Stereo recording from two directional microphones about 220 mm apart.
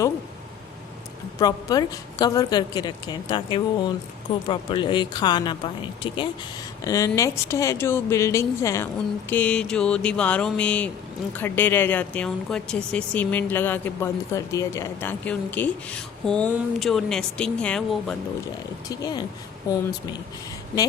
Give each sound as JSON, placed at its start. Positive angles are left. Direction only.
{"t": 1.4, "sound": "speech", "side_deg": 15}
{"t": 9.3, "sound": "a sound", "side_deg": 5}
{"t": 11.3, "sound": "speech", "side_deg": 10}
{"t": 18.9, "sound": "speech", "side_deg": 15}